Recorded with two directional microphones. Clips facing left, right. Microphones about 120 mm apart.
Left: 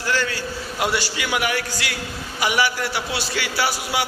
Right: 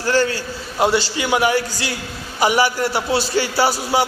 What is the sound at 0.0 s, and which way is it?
A man's voice, 35° right (ahead or behind).